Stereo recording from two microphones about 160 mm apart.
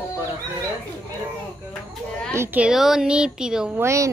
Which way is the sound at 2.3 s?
5° right (ahead or behind).